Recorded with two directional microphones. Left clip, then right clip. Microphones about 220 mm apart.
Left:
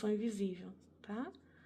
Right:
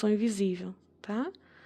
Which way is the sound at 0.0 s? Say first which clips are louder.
Right 9 dB; 45° right (ahead or behind).